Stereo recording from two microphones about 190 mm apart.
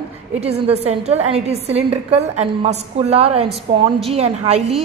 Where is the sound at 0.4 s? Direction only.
35° right (ahead or behind).